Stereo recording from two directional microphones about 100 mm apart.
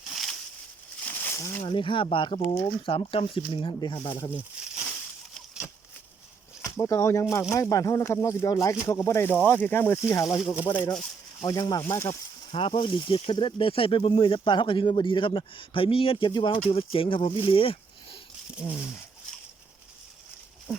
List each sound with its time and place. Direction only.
0.1 s a sound: centre (ahead or behind)
1.0 s a sound: 15° left (ahead or behind)
1.6 s speech: 60° left (ahead or behind)
4.4 s a sound: 10° right (ahead or behind)
6.7 s speech: 35° left (ahead or behind)
10.7 s speech: 50° left (ahead or behind)
11.4 s speech: 40° left (ahead or behind)
12.5 s speech: 60° left (ahead or behind)
16.6 s speech: 65° left (ahead or behind)
18.6 s speech: 25° left (ahead or behind)